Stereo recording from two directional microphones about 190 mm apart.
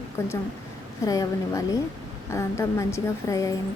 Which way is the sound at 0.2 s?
15° left (ahead or behind).